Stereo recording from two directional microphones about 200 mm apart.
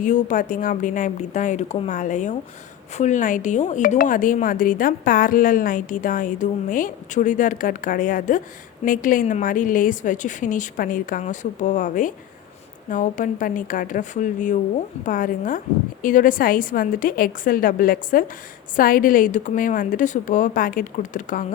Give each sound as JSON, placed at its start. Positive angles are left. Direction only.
{"t": 0.0, "sound": "a woman's voice", "side_deg": 40}